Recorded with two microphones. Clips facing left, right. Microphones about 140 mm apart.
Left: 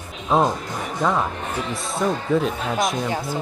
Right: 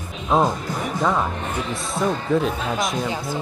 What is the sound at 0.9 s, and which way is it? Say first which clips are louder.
Speech: left 1 dB; centre (ahead or behind).